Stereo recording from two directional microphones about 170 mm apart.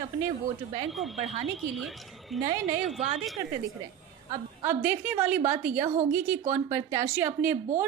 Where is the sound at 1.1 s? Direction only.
40° right (ahead or behind).